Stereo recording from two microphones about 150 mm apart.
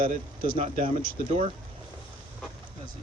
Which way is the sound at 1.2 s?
40° right (ahead or behind).